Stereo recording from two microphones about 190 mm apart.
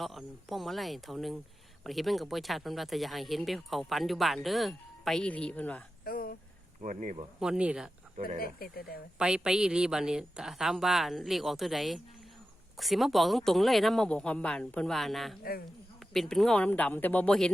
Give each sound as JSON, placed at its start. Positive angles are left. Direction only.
{"t": 0.0, "sound": "speech", "side_deg": 0}
{"t": 6.1, "sound": "a sound", "side_deg": 50}
{"t": 6.8, "sound": "speech", "side_deg": -40}
{"t": 7.3, "sound": "speech", "side_deg": -5}
{"t": 8.4, "sound": "speech", "side_deg": 50}
{"t": 9.1, "sound": "speech", "side_deg": -5}